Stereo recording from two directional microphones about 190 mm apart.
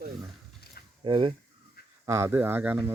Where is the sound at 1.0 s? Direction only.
25° right (ahead or behind).